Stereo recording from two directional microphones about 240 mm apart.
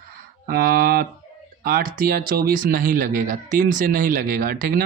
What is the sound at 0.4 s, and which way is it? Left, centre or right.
Speech, right.